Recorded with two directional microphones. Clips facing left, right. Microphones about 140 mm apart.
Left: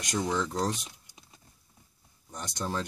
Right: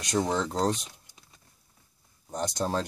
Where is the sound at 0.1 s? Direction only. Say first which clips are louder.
Right 3 dB; 30° right (ahead or behind).